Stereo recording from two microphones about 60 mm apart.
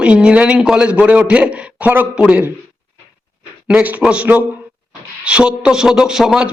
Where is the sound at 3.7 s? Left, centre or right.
Right; by 6.5 s centre.